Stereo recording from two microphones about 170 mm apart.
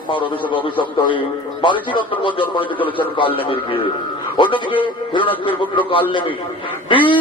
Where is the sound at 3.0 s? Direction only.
30° left (ahead or behind).